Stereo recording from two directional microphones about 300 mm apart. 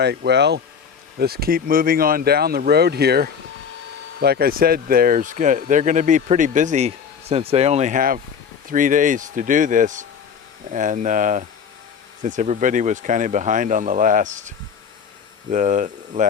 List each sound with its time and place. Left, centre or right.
0.0 s speech: right